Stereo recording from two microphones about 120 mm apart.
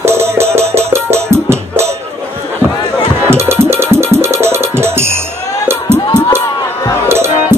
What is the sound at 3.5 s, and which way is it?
Music, 20° right (ahead or behind).